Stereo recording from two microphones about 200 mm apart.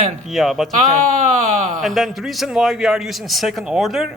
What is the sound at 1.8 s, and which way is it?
A man's voice, centre (ahead or behind).